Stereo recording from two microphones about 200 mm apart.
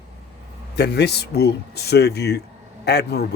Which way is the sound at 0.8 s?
55° left (ahead or behind).